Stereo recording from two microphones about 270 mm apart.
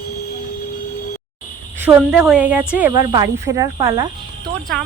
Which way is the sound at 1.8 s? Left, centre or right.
Centre.